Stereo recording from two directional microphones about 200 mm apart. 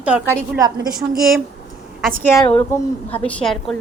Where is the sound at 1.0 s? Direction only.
Centre (ahead or behind).